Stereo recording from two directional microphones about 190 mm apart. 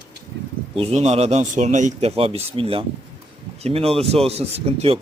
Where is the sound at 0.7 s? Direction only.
35° right (ahead or behind).